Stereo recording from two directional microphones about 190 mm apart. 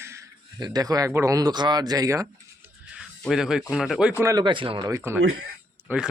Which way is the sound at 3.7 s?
Centre (ahead or behind).